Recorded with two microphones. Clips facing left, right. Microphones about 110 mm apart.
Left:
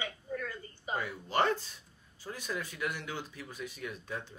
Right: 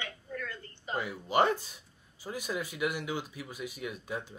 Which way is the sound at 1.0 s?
15° right (ahead or behind).